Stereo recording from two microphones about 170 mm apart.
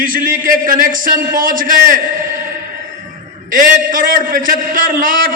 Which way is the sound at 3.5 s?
50° right (ahead or behind).